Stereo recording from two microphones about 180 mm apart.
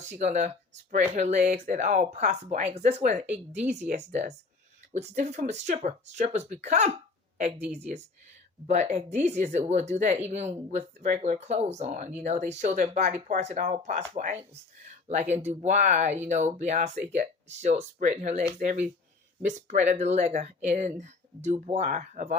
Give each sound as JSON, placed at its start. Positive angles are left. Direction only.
{"t": 0.0, "sound": "speech", "side_deg": -45}